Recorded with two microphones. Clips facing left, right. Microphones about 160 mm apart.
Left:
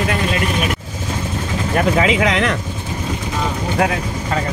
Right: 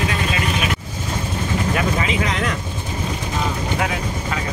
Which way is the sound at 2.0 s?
90° left.